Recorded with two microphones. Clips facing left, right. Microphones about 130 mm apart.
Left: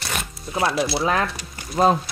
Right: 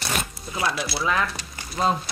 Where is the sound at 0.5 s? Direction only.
30° left (ahead or behind).